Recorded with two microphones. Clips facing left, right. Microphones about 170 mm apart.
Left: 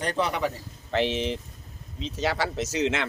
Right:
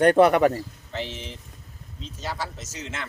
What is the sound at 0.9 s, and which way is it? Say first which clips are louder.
Speech: left 9 dB; 70° left (ahead or behind).